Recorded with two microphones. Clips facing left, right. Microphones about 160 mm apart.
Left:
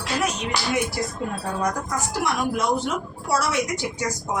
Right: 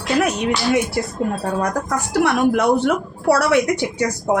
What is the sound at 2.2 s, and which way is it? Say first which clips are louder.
A woman's voice: right 8 dB; 65° right (ahead or behind).